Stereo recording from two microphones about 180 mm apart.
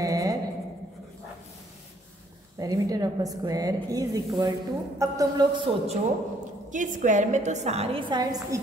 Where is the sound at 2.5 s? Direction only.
20° right (ahead or behind).